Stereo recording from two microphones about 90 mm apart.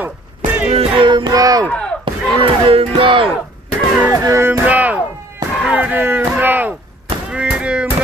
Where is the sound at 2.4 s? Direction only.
90° right.